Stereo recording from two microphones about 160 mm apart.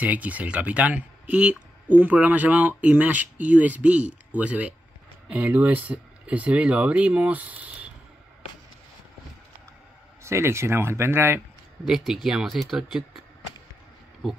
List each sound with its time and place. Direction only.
0.0 s speech: 10° right (ahead or behind)
10.2 s speech: 15° right (ahead or behind)
11.8 s speech: centre (ahead or behind)